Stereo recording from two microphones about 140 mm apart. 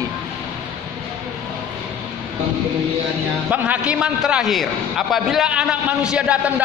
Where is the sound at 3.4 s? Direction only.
10° right (ahead or behind).